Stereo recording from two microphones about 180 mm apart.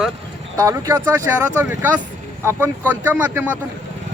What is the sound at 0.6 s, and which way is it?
Speech, 20° right (ahead or behind).